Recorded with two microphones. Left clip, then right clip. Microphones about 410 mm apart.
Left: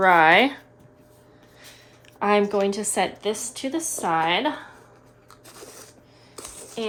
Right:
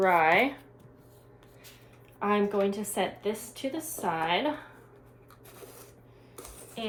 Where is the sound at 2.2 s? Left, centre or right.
Left.